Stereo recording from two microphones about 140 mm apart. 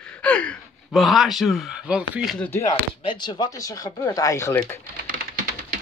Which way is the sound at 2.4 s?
15° left (ahead or behind).